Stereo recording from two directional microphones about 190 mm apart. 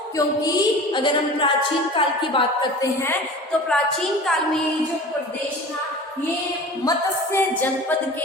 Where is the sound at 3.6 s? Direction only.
5° left (ahead or behind).